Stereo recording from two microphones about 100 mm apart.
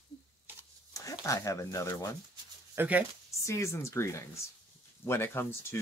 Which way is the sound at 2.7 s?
20° right (ahead or behind).